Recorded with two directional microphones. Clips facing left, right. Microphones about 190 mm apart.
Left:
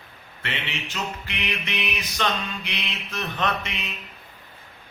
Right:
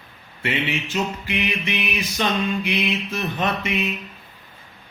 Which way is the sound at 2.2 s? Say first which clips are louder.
Right 5 dB; 10° right (ahead or behind).